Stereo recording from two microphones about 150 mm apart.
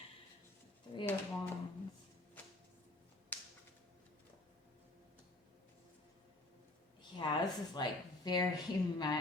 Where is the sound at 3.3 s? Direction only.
15° left (ahead or behind).